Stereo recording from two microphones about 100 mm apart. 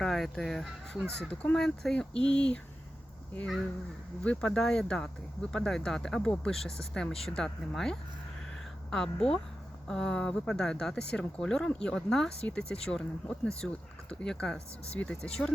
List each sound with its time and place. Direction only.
0.0 s speech: 5° left (ahead or behind)
1.3 s speech: 10° left (ahead or behind)
4.2 s speech: 10° left (ahead or behind)